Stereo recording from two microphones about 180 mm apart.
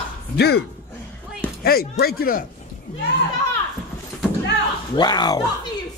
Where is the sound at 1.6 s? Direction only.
60° left (ahead or behind).